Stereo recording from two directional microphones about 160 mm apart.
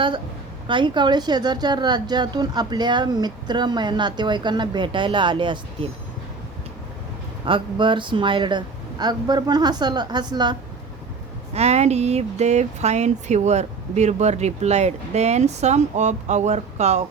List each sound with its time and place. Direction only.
0.7 s speech: 30° right (ahead or behind)
7.4 s speech: 30° right (ahead or behind)
11.5 s speech: 40° right (ahead or behind)